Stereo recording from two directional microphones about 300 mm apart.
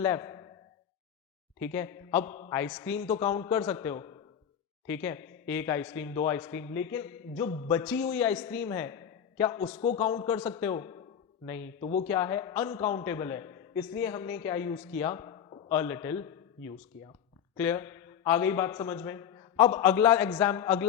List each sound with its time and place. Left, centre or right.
0.0 s speech: centre
1.6 s a man's voice: centre
12.0 s a man's voice: centre
17.6 s a man's voice: centre